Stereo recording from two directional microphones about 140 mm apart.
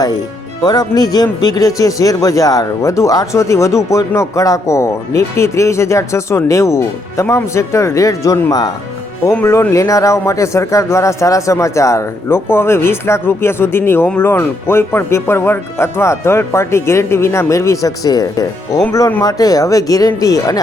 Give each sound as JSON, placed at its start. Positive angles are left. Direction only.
{"t": 0.6, "sound": "a man's voice", "side_deg": 30}